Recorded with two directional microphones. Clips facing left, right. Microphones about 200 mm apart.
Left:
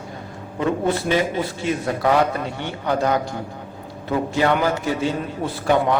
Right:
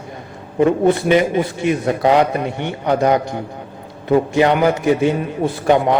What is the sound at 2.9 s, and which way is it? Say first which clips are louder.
A man's voice: right 5 dB; 20° right (ahead or behind).